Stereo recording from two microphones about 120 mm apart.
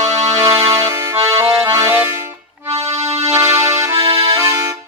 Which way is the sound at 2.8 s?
25° right (ahead or behind).